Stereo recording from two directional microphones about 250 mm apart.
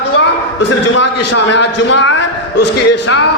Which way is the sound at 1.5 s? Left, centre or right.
Left.